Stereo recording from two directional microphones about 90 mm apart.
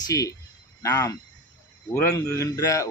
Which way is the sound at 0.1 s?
40° left (ahead or behind).